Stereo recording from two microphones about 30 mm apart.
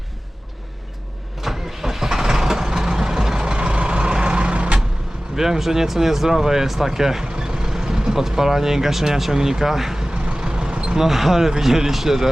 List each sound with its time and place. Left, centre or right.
1.4 s vehicle: centre
3.5 s vehicle: right
5.4 s speech: centre
10.4 s vehicle: right
11.0 s speech: centre